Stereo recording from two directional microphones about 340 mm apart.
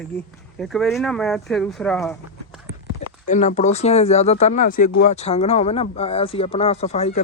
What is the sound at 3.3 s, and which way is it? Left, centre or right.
Speech, left.